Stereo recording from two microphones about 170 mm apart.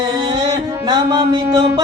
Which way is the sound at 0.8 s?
25° right (ahead or behind).